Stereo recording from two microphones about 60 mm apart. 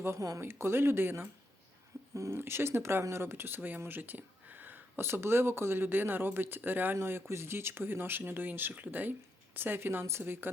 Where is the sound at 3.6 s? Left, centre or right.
Right.